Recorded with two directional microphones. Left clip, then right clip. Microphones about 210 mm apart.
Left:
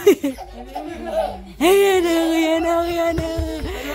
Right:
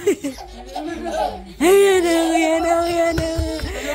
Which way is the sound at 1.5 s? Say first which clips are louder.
Right 1 dB; 20° left (ahead or behind).